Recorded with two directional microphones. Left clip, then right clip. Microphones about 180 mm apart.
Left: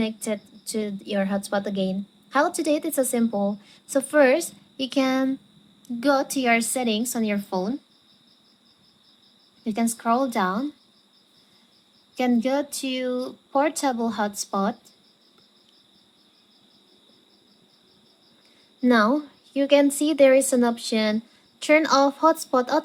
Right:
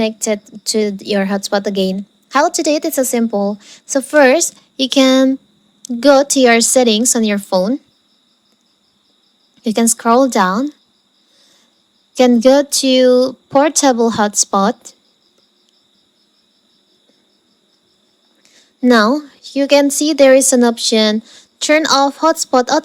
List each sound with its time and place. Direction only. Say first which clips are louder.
0.0 s a woman's voice: right 11 dB; 40° right (ahead or behind)
9.6 s speech: right 10 dB; 45° right (ahead or behind)
12.1 s a woman's voice: right 14 dB; 40° right (ahead or behind)
18.9 s a woman's voice: right 8 dB; 40° right (ahead or behind)